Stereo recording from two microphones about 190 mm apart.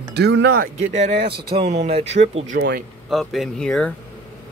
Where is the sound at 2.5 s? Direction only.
50° right (ahead or behind).